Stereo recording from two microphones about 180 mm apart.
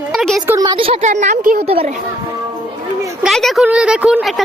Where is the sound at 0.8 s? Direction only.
35° right (ahead or behind).